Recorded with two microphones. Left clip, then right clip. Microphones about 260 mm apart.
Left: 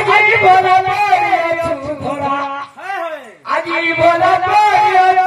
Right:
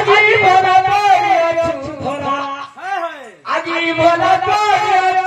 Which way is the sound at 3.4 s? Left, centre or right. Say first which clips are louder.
Left 1 dB; centre.